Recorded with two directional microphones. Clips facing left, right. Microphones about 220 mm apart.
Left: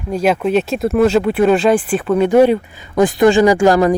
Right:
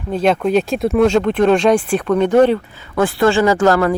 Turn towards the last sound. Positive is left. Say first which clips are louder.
# left 2 dB
turn(degrees=15)  # may be behind; listen again after turning